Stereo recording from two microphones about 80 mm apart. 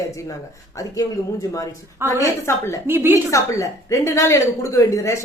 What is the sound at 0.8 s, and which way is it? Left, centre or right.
Speech, left.